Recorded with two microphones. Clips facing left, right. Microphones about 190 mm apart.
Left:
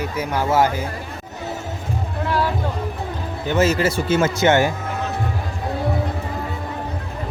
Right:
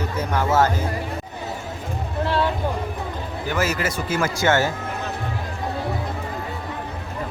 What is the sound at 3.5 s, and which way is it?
Speech, 25° left (ahead or behind).